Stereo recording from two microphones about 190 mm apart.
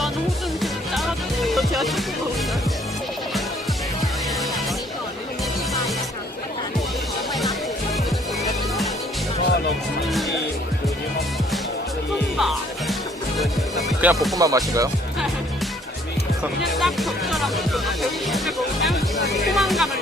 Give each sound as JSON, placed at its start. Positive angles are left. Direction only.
{"t": 0.6, "sound": "music", "side_deg": 0}
{"t": 12.4, "sound": "music", "side_deg": 0}
{"t": 14.0, "sound": "music", "side_deg": -10}
{"t": 16.4, "sound": "speech", "side_deg": 0}